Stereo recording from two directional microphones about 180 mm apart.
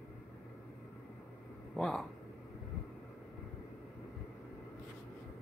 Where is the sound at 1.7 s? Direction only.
Centre (ahead or behind).